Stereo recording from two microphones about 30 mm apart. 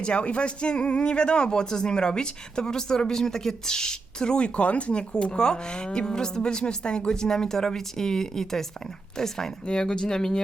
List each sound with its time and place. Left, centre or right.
0.0 s speech: left
7.1 s speech: left
9.9 s speech: left